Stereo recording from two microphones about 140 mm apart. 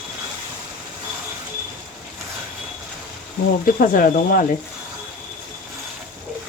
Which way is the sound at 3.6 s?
85° left.